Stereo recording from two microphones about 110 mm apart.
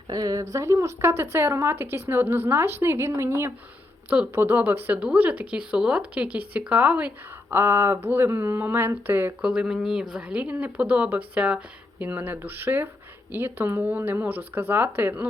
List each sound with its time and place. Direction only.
0.1 s a sound: 35° right (ahead or behind)
0.5 s a woman's voice: 25° right (ahead or behind)
9.5 s a woman's voice: 10° right (ahead or behind)